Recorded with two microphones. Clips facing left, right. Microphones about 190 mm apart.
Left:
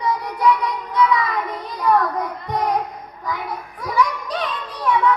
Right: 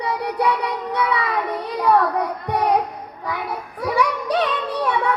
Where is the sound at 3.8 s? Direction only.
65° right (ahead or behind).